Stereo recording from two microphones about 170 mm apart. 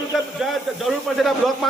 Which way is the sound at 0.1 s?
Centre (ahead or behind).